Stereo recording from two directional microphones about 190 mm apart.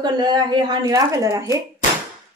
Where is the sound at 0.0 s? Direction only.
20° right (ahead or behind).